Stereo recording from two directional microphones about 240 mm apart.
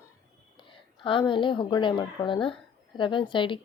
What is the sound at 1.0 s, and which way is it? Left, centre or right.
A woman's voice, left.